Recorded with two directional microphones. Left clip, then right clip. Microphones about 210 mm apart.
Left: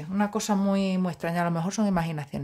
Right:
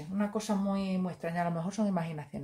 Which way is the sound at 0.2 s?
50° left (ahead or behind).